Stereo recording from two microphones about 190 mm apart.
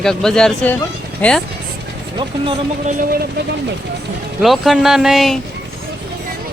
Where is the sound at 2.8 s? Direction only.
50° right (ahead or behind).